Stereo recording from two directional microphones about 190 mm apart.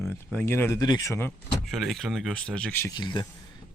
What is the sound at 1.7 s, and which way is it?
Speech, centre (ahead or behind).